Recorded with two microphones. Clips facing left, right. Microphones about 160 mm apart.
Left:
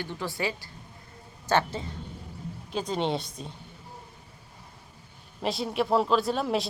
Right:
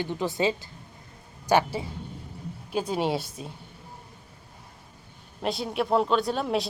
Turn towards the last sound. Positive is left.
turn(degrees=0)  # may be behind; listen again after turning